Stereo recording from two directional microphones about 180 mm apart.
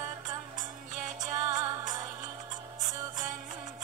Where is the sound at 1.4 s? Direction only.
20° right (ahead or behind).